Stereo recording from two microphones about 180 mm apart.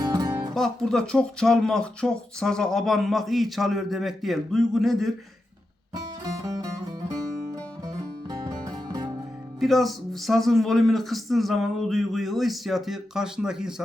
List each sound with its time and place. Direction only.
0.0 s music: 20° right (ahead or behind)
0.5 s speech: centre (ahead or behind)
6.2 s music: 20° right (ahead or behind)
8.3 s music: 20° right (ahead or behind)
9.6 s speech: centre (ahead or behind)